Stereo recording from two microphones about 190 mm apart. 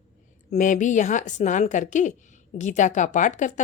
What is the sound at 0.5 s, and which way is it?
A woman's voice, 40° left (ahead or behind).